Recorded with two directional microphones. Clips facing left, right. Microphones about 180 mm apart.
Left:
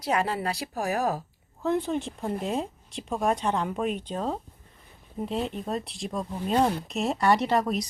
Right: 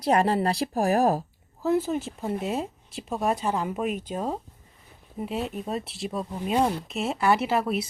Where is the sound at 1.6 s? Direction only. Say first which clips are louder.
Right 2 dB; 5° right (ahead or behind).